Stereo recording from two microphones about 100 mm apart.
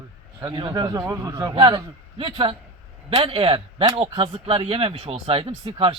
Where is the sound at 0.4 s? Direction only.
55° right (ahead or behind).